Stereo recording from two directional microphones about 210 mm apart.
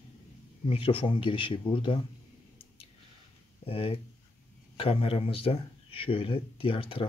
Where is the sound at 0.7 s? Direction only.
25° left (ahead or behind).